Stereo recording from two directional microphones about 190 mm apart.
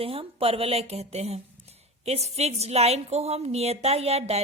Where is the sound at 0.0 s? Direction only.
30° right (ahead or behind).